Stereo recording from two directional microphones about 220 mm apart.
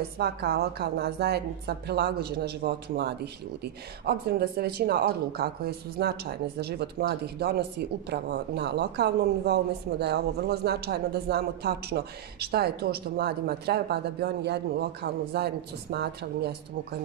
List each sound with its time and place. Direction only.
0.2 s speech: 45° right (ahead or behind)